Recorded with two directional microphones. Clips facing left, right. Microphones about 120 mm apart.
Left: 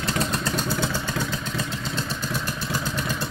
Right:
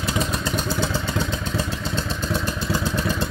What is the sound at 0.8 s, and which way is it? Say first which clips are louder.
Vehicle: right 2 dB; 15° right (ahead or behind).